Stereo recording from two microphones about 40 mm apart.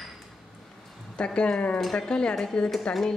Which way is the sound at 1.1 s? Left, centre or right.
Left.